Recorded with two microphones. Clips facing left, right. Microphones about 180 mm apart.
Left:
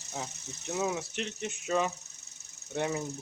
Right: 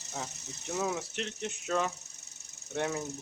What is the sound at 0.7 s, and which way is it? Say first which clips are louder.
Speech: left 1 dB; 5° left (ahead or behind).